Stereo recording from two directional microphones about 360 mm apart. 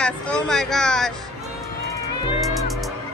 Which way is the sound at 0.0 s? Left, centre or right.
Centre.